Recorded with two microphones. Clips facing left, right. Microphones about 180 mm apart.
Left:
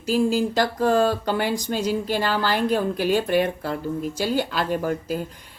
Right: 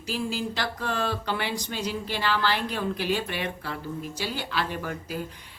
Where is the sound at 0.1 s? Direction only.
45° left (ahead or behind).